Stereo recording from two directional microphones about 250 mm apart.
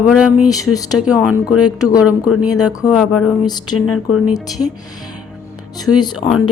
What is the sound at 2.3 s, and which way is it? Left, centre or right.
Speech, left.